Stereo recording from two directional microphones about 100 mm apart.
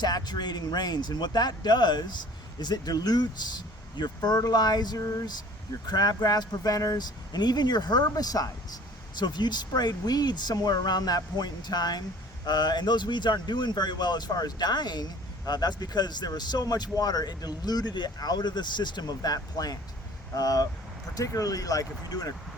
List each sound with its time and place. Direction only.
0.0 s speech: 45° left (ahead or behind)